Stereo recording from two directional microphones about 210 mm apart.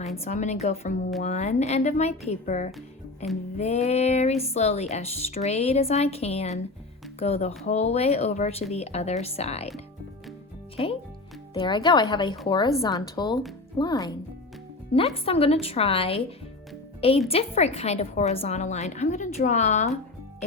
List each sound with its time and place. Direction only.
0.2 s a woman's voice: 35° left (ahead or behind)